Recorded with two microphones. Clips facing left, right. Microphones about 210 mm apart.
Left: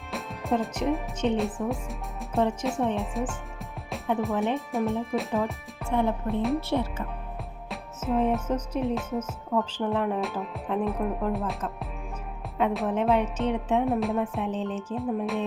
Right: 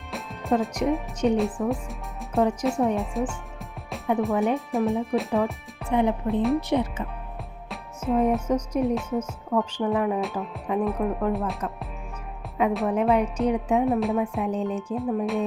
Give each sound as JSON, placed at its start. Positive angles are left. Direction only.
{"t": 0.1, "sound": "music", "side_deg": 0}
{"t": 0.9, "sound": "speech", "side_deg": -5}
{"t": 5.9, "sound": "music", "side_deg": -15}
{"t": 7.7, "sound": "music", "side_deg": 0}
{"t": 8.3, "sound": "speech", "side_deg": 5}
{"t": 8.7, "sound": "music", "side_deg": -10}
{"t": 9.0, "sound": "speech", "side_deg": 5}
{"t": 12.5, "sound": "music", "side_deg": -5}
{"t": 13.2, "sound": "speech", "side_deg": 5}
{"t": 13.5, "sound": "music", "side_deg": -10}
{"t": 14.8, "sound": "speech", "side_deg": 0}